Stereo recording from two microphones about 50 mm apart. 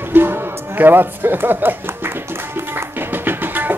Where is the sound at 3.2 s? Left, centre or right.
Right.